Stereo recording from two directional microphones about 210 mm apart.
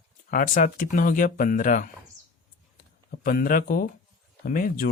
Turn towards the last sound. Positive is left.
turn(degrees=40)  # may be behind; listen again after turning